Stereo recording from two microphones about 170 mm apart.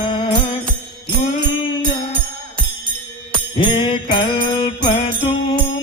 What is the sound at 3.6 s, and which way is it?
Jingle bell, 25° left (ahead or behind).